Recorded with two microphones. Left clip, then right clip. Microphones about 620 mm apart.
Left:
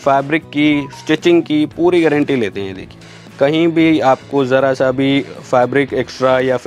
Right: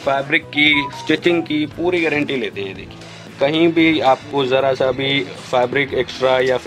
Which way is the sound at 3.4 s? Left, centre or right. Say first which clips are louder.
Left 2 dB; left.